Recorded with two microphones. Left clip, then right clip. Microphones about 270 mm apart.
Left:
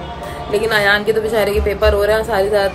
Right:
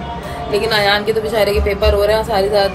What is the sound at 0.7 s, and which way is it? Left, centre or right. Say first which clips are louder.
Speech: left 1 dB; centre.